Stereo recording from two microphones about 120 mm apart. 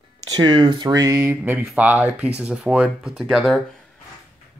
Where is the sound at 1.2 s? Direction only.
15° right (ahead or behind); by 3.6 s centre (ahead or behind).